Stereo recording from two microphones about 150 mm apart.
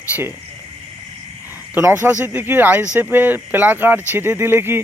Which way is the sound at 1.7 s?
15° right (ahead or behind).